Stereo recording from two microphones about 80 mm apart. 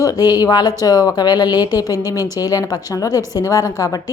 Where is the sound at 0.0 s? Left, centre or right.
Left.